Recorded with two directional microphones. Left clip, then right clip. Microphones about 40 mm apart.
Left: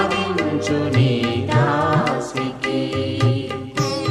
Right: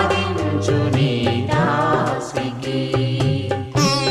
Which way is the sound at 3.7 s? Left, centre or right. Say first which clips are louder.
Right 4 dB; right.